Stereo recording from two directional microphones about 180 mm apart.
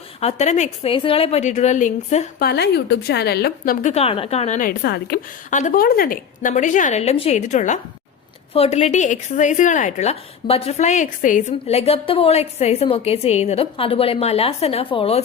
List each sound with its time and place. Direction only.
0.2 s a woman's voice: 35° left (ahead or behind)
2.4 s a woman's voice: 65° left (ahead or behind)
3.8 s a woman's voice: 35° left (ahead or behind)
4.8 s a woman's voice: 60° left (ahead or behind); by 15.2 s 35° left (ahead or behind)